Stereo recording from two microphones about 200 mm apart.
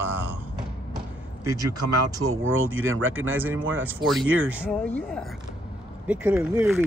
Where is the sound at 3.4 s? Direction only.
10° right (ahead or behind).